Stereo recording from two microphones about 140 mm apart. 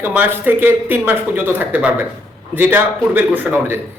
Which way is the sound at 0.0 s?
10° right (ahead or behind).